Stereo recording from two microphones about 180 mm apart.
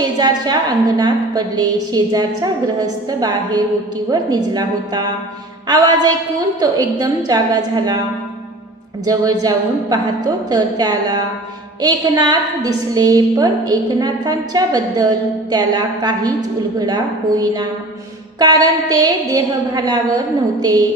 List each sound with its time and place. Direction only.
0.9 s a woman's voice: 20° right (ahead or behind)
9.0 s a woman's voice: 20° right (ahead or behind)